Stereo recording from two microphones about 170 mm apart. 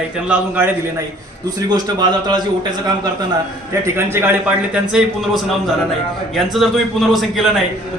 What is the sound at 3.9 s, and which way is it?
A man's voice, 15° right (ahead or behind).